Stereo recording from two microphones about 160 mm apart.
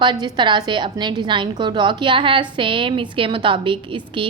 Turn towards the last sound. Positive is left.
turn(degrees=-30)  # may be behind; listen again after turning